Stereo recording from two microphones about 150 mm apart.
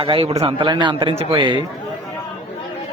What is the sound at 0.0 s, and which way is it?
A man's voice, 35° right (ahead or behind).